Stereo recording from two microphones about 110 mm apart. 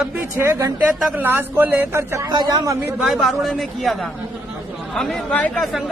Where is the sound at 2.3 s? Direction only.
35° right (ahead or behind).